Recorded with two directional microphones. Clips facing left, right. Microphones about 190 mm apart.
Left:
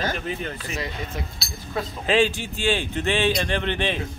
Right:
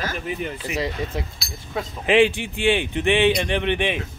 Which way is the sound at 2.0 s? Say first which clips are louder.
Right 4 dB; 20° right (ahead or behind).